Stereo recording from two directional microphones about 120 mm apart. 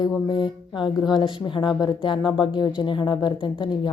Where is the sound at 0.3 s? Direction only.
40° left (ahead or behind).